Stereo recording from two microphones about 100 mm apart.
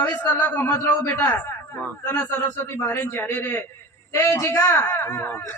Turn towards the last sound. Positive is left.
turn(degrees=20)  # may be behind; listen again after turning